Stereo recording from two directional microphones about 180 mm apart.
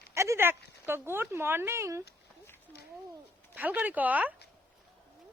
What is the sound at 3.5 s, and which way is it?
Speech, 10° right (ahead or behind).